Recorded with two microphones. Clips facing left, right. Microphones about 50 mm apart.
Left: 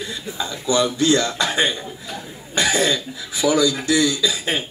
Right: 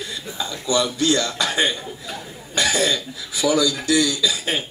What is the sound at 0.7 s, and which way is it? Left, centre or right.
Speech, left.